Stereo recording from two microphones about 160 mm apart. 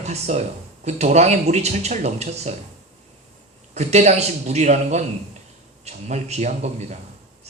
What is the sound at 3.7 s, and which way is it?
Speech, 45° right (ahead or behind).